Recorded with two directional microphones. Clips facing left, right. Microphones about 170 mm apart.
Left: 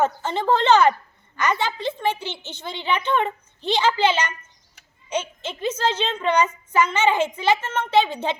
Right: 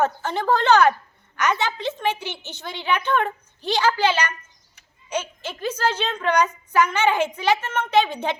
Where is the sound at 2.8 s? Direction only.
15° left (ahead or behind).